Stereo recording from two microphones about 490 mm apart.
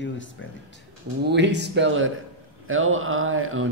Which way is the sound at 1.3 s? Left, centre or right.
Right.